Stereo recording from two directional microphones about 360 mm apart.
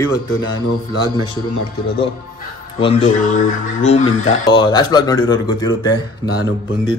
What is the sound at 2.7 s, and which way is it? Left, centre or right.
Speech, centre.